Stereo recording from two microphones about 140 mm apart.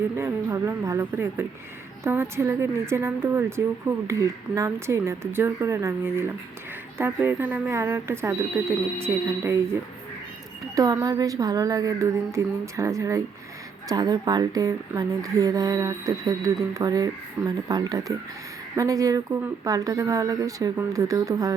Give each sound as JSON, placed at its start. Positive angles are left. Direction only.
{"t": 0.2, "sound": "a woman's voice", "side_deg": -20}
{"t": 10.8, "sound": "a woman's voice", "side_deg": -25}